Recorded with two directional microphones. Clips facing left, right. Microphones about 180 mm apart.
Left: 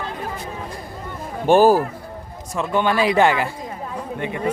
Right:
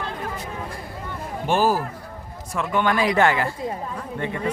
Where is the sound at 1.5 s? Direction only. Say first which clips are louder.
Left 7 dB; 55° left (ahead or behind).